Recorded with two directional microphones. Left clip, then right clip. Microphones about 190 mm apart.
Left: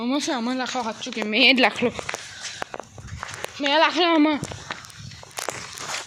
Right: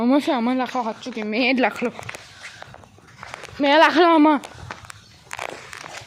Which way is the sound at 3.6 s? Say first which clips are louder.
Right 5 dB; 65° right (ahead or behind).